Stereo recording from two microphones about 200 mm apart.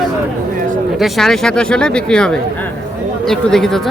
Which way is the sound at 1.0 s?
Centre (ahead or behind).